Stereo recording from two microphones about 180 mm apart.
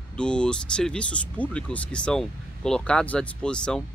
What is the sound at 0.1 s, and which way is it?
Speech, 5° left (ahead or behind).